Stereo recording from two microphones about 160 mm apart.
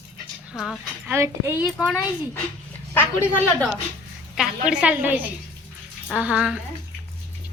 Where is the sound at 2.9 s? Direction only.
15° left (ahead or behind).